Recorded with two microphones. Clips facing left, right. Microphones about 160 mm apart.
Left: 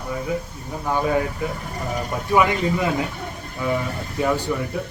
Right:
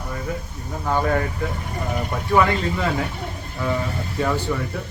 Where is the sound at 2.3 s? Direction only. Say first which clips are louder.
Even; 15° left (ahead or behind).